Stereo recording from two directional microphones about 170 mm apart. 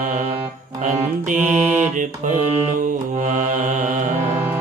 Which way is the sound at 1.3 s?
10° right (ahead or behind).